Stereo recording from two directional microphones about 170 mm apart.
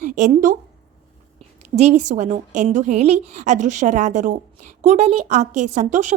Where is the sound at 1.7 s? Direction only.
40° right (ahead or behind).